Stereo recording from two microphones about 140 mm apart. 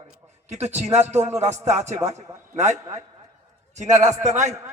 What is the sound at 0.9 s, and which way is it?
Music, 50° right (ahead or behind).